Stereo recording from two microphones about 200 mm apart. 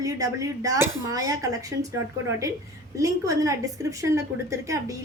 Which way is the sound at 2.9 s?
15° right (ahead or behind).